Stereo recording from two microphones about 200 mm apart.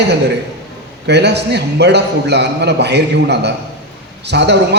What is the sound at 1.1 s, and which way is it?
A man's voice, 60° right (ahead or behind).